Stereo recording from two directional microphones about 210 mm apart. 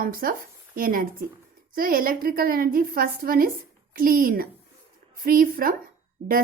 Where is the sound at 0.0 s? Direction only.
40° right (ahead or behind).